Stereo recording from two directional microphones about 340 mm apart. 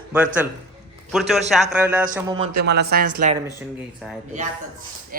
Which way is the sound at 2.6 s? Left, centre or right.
Right.